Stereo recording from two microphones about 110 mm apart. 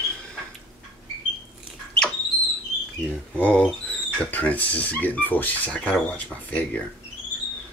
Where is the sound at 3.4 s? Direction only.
15° left (ahead or behind).